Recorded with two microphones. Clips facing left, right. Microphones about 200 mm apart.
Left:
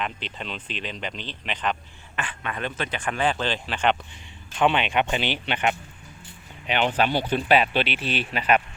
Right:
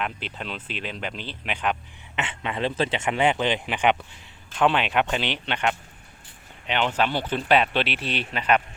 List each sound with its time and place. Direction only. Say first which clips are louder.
0.0 s speech: even; 5° right (ahead or behind)
2.1 s speech: right 3 dB; 25° right (ahead or behind)
4.1 s speech: left 1 dB; centre (ahead or behind)